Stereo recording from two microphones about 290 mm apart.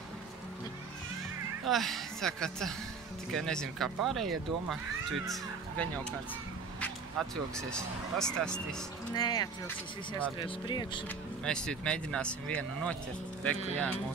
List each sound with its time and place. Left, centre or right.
1.7 s speech: centre
9.1 s speech: centre
11.4 s speech: centre